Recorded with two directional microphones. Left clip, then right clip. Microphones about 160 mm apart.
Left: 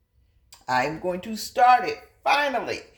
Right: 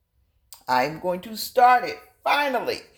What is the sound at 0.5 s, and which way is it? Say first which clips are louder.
Speech: right 2 dB; 30° right (ahead or behind).